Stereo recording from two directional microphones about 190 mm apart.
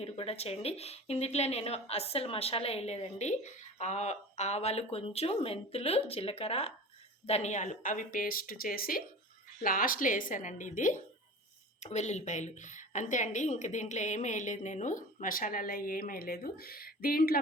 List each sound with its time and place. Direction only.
0.0 s a woman's voice: 30° left (ahead or behind); by 17.4 s 50° left (ahead or behind)